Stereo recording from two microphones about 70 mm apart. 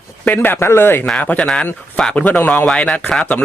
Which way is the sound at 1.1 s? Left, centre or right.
Centre.